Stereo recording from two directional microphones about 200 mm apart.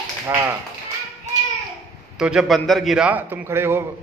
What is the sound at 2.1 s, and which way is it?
A man's voice, 5° right (ahead or behind).